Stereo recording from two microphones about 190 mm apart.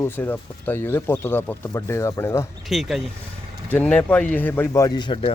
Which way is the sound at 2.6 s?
Centre (ahead or behind).